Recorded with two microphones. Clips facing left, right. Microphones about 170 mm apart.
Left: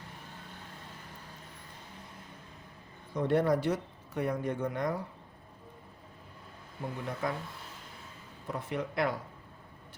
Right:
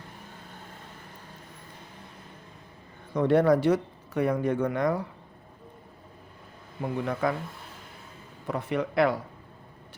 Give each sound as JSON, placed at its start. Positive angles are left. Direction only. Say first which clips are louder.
{"t": 3.1, "sound": "speech", "louder": "right 6 dB", "side_deg": -85}
{"t": 6.8, "sound": "speech", "louder": "right 7 dB", "side_deg": -80}
{"t": 8.4, "sound": "speech", "louder": "right 6 dB", "side_deg": -75}